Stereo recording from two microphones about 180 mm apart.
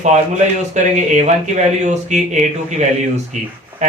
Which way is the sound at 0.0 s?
40° right (ahead or behind).